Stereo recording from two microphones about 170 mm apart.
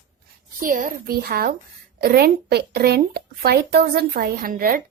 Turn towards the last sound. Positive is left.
turn(degrees=-55)  # may be behind; listen again after turning